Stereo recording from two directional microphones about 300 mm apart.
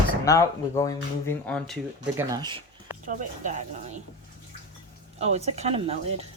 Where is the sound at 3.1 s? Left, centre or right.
Right.